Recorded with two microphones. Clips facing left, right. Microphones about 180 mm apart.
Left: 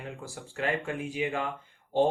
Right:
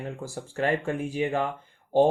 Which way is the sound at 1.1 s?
35° right (ahead or behind).